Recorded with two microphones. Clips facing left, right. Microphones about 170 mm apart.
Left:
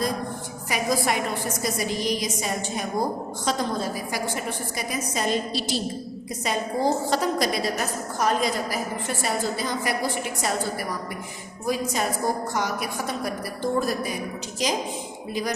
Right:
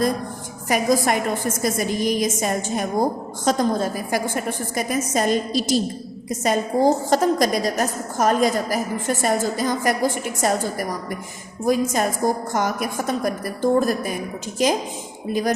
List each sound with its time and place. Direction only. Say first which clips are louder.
0.7 s a woman's voice: right 5 dB; 45° right (ahead or behind)